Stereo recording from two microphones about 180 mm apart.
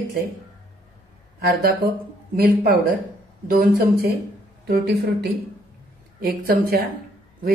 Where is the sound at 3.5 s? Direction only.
55° right (ahead or behind).